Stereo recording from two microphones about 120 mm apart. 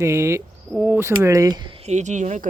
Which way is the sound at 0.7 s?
5° right (ahead or behind).